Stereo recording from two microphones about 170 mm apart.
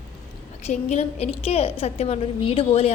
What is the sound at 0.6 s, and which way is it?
A woman's voice, 40° left (ahead or behind).